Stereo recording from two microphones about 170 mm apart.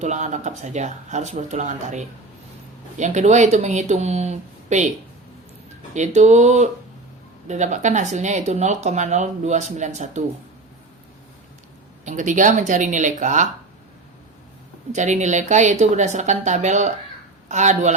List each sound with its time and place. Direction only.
0.0 s speech: 45° right (ahead or behind)
5.9 s speech: 45° right (ahead or behind)
12.0 s speech: 45° right (ahead or behind)
14.9 s speech: 45° right (ahead or behind)